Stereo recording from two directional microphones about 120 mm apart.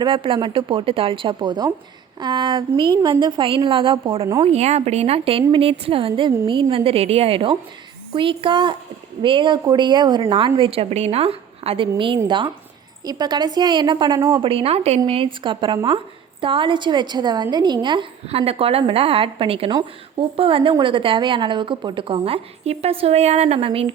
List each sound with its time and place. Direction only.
0.0 s a woman's voice: 45° right (ahead or behind)
4.4 s a woman's voice: 65° right (ahead or behind); by 12.2 s 45° right (ahead or behind)
13.1 s a woman's voice: 35° right (ahead or behind)
14.2 s a woman's voice: 25° right (ahead or behind)
14.4 s a woman's voice: 55° right (ahead or behind)
18.3 s a woman's voice: 55° right (ahead or behind)